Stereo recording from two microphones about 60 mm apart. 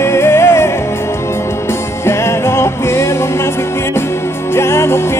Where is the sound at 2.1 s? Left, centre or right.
Left.